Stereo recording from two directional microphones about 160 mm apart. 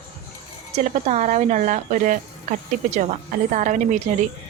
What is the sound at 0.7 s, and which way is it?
Speech, 45° right (ahead or behind).